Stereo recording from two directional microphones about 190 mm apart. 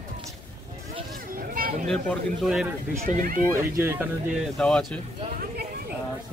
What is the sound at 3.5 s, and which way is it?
Speech, 10° right (ahead or behind).